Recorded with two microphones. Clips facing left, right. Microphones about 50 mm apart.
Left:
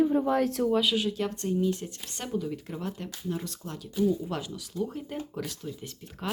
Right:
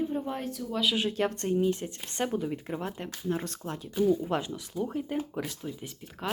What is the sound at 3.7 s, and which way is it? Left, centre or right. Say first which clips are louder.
Speech: right 1 dB; right.